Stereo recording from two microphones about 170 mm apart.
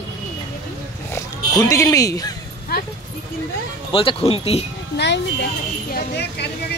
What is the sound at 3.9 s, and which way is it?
Speech, 30° left (ahead or behind).